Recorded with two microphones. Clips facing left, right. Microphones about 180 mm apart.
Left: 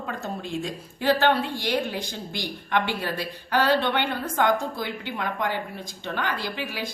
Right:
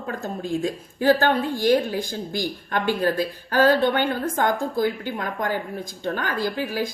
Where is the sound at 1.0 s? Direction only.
45° right (ahead or behind).